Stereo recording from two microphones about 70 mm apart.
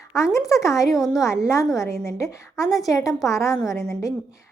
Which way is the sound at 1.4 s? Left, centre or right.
Left.